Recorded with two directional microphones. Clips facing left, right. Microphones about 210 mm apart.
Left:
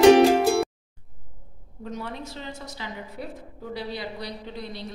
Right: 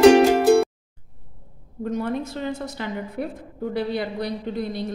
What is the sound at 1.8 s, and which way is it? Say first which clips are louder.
A woman's voice: right 9 dB; 50° right (ahead or behind).